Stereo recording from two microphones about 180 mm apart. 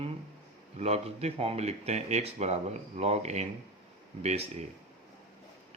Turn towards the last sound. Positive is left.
turn(degrees=-35)  # may be behind; listen again after turning